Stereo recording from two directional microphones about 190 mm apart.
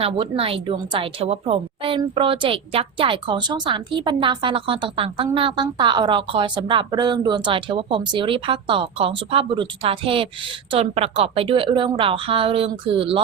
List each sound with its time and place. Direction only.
0.0 s a woman's voice: 30° right (ahead or behind)